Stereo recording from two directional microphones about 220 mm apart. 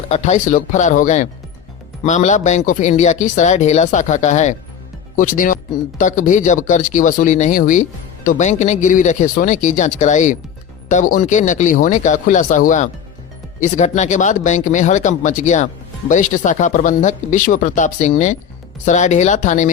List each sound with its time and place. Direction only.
0.1 s speech: 30° left (ahead or behind)